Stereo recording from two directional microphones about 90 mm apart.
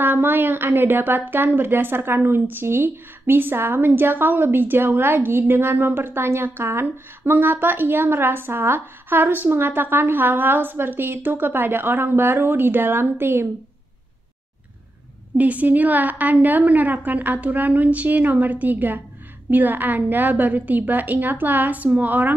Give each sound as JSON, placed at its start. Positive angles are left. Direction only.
{"t": 0.0, "sound": "a woman's voice", "side_deg": -20}
{"t": 15.3, "sound": "a woman's voice", "side_deg": -15}